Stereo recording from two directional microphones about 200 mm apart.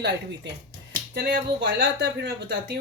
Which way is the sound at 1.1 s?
55° right (ahead or behind).